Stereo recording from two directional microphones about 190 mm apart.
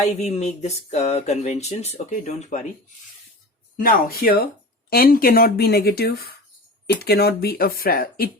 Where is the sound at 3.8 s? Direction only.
50° left (ahead or behind).